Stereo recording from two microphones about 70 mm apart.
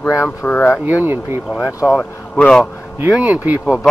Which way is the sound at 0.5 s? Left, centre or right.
Left.